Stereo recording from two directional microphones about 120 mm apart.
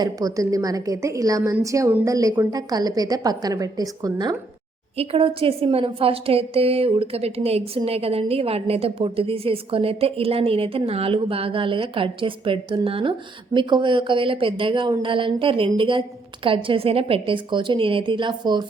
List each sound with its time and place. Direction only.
0.0 s a woman's voice: 30° right (ahead or behind)
4.9 s a woman's voice: 50° right (ahead or behind)